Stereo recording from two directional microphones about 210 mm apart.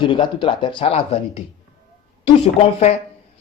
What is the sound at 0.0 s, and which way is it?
Speech, 20° left (ahead or behind).